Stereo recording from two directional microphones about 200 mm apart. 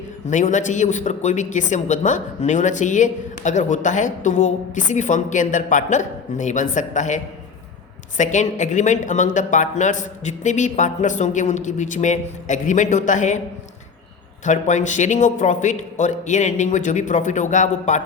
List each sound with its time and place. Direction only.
0.3 s a man's voice: 40° left (ahead or behind)
8.2 s a man's voice: 40° left (ahead or behind)
14.4 s a man's voice: 35° left (ahead or behind)